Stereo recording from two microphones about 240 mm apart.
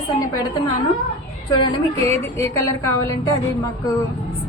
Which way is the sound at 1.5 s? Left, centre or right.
Centre.